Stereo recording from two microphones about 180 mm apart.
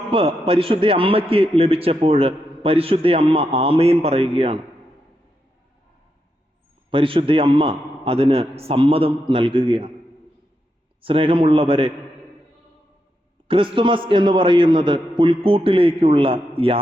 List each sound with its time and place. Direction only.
0.1 s a man's voice: 30° right (ahead or behind)
6.9 s a man's voice: 30° right (ahead or behind)
11.0 s a man's voice: 30° right (ahead or behind)
13.5 s a man's voice: 30° right (ahead or behind)